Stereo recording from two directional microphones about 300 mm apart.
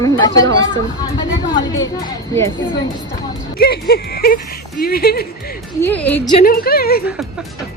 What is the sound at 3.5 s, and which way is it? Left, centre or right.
Speech, left.